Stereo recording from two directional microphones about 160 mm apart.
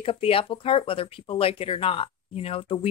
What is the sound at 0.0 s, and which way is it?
Speech, 35° left (ahead or behind).